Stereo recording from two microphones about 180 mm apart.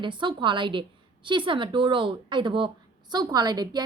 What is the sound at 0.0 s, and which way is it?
A woman's voice, 25° right (ahead or behind).